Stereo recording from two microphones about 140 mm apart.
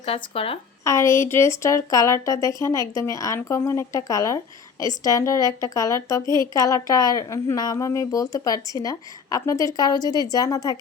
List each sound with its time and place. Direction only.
0.0 s speech: 40° left (ahead or behind)
0.9 s speech: 20° left (ahead or behind)